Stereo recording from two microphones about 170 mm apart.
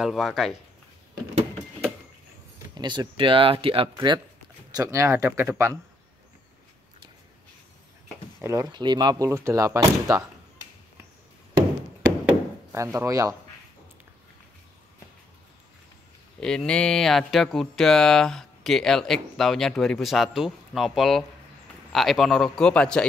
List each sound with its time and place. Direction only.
0.0 s speech: centre (ahead or behind)
2.7 s speech: 25° right (ahead or behind)
4.7 s speech: 20° right (ahead or behind)
8.4 s speech: 15° right (ahead or behind)
12.7 s speech: 20° right (ahead or behind)
16.3 s speech: 5° left (ahead or behind)